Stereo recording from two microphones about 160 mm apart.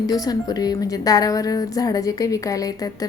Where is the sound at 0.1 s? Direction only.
25° left (ahead or behind).